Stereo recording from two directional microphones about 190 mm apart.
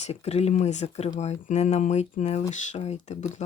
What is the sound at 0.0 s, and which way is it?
Speech, 35° left (ahead or behind).